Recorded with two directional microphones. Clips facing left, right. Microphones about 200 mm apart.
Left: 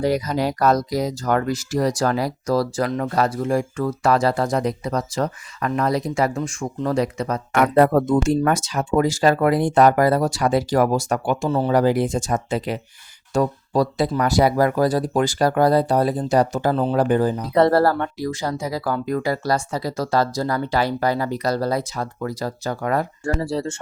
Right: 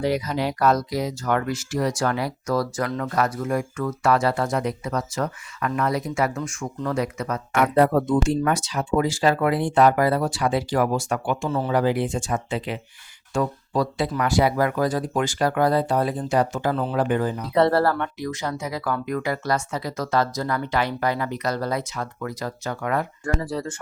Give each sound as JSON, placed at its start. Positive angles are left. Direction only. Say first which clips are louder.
{"t": 0.0, "sound": "speech", "louder": "left 3 dB", "side_deg": 40}